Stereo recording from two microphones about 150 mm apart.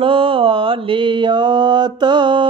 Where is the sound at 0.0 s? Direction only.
35° right (ahead or behind).